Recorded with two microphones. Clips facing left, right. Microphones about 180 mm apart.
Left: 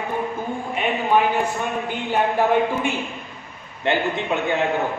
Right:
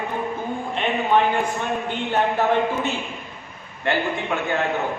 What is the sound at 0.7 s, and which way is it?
A man's voice, 10° left (ahead or behind).